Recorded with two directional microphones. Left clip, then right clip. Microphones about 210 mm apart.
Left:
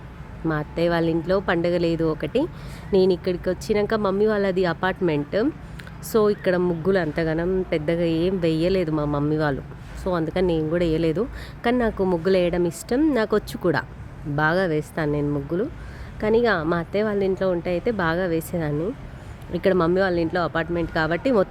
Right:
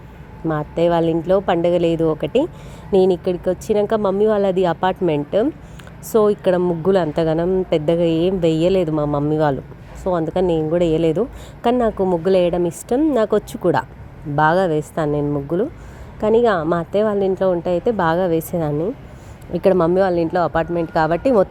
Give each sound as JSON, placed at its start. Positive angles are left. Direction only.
{"t": 0.4, "sound": "a woman's voice", "side_deg": 0}